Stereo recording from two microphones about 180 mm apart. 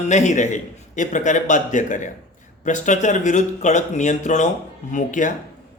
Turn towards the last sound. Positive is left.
turn(degrees=45)  # may be behind; listen again after turning